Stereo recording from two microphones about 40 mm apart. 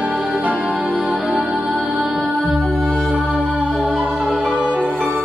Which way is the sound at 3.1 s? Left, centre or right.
Centre.